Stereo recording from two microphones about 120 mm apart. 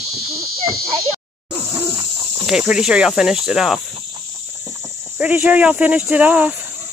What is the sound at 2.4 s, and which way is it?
Speech, 5° right (ahead or behind).